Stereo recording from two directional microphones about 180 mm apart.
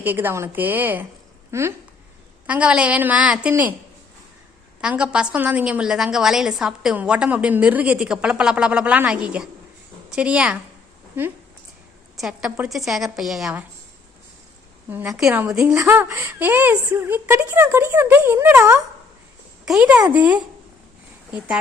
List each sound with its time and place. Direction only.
0.0 s speech: 10° right (ahead or behind)
4.8 s a woman's voice: 5° right (ahead or behind)
12.1 s a woman's voice: 5° right (ahead or behind)
14.8 s speech: 5° right (ahead or behind)
19.6 s a woman's voice: 5° right (ahead or behind)